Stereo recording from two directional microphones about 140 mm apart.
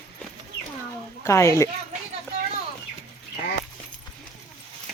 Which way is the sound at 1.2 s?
20° left (ahead or behind).